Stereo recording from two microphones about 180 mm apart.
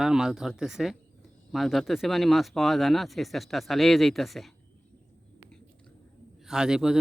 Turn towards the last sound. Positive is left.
turn(degrees=-5)  # may be behind; listen again after turning